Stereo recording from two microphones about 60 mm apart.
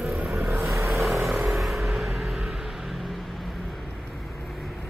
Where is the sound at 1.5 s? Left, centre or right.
Centre.